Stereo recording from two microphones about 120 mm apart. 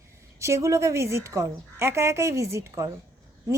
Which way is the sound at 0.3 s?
25° right (ahead or behind).